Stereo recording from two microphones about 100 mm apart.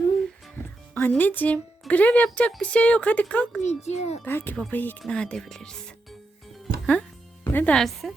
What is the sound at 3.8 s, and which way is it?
Speech, 90° left.